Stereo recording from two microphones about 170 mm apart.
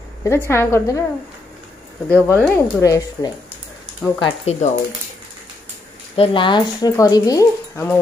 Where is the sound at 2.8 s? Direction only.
20° left (ahead or behind).